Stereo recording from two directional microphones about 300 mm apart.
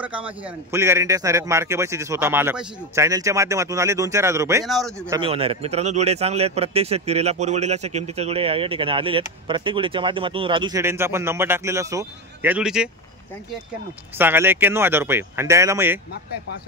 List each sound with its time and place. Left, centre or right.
0.0 s a man's voice: centre
5.1 s a man's voice: centre
14.1 s a man's voice: centre